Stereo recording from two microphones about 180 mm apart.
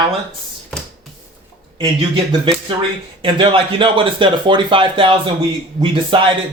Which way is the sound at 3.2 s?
30° right (ahead or behind).